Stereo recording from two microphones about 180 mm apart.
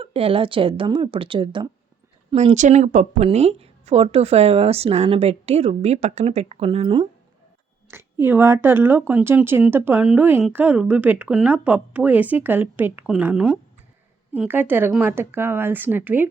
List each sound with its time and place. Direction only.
0.0 s speech: 30° right (ahead or behind)
7.9 s speech: 15° right (ahead or behind)